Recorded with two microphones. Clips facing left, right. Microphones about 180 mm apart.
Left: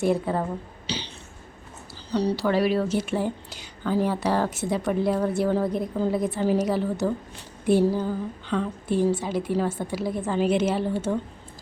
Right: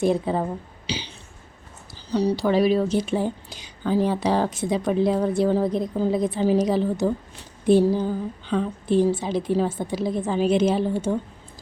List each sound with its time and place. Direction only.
0.0 s a woman's voice: 15° right (ahead or behind)
0.9 s throat clearing: 10° right (ahead or behind)
2.1 s a woman's voice: 15° right (ahead or behind)